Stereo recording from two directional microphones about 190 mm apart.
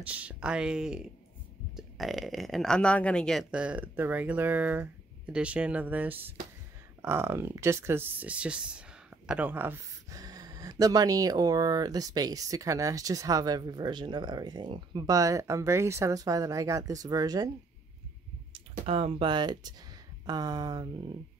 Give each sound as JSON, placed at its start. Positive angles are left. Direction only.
{"t": 0.0, "sound": "speech", "side_deg": -5}
{"t": 18.5, "sound": "speech", "side_deg": -30}